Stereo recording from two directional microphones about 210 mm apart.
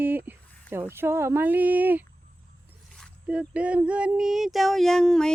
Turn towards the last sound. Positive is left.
turn(degrees=0)  # may be behind; listen again after turning